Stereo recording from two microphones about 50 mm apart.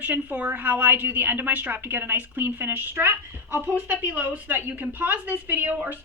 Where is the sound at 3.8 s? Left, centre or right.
Right.